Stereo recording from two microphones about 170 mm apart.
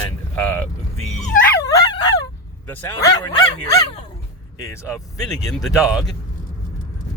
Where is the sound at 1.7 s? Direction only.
25° left (ahead or behind).